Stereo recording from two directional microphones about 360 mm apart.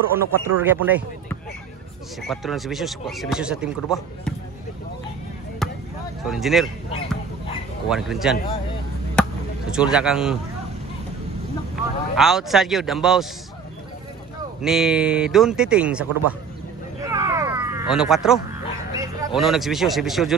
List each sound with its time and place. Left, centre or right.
0.1 s speech: centre
2.2 s speech: centre
5.6 s basketball bounce: centre
6.2 s speech: centre
7.9 s speech: centre
9.8 s speech: centre
11.7 s speech: centre
14.6 s speech: centre
17.0 s a sound: centre
18.9 s a man's voice: centre